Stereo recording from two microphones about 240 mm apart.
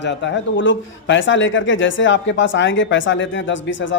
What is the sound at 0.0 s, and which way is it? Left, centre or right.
A man's voice, left.